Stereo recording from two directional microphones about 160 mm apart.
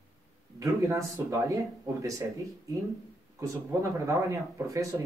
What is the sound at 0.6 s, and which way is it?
Speech, 20° right (ahead or behind).